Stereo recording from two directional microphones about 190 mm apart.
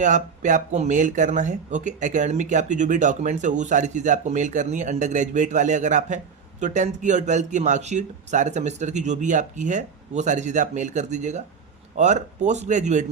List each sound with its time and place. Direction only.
0.0 s speech: 40° right (ahead or behind)